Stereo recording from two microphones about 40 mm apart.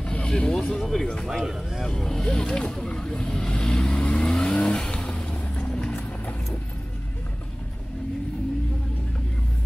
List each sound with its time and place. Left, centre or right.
0.0 s a sound: left
0.3 s speech: left
0.7 s speech: centre
1.4 s speech: centre
2.0 s speech: centre
4.3 s vehicle: centre